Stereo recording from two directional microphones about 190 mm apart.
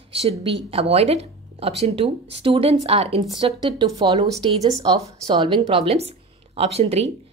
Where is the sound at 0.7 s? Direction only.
30° right (ahead or behind).